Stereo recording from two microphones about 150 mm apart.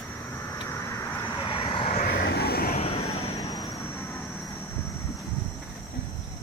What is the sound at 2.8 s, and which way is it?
Vehicle, 45° left (ahead or behind).